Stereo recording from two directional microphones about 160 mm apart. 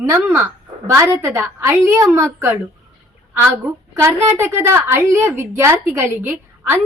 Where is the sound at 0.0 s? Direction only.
15° right (ahead or behind).